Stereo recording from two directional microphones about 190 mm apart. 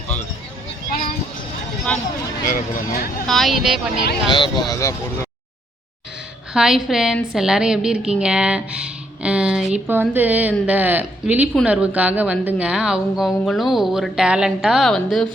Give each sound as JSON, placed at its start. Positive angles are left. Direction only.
{"t": 1.9, "sound": "speech", "side_deg": 5}
{"t": 2.5, "sound": "speech", "side_deg": 50}
{"t": 3.2, "sound": "a woman's voice", "side_deg": 0}
{"t": 4.3, "sound": "speech", "side_deg": 25}
{"t": 6.5, "sound": "a woman's voice", "side_deg": -5}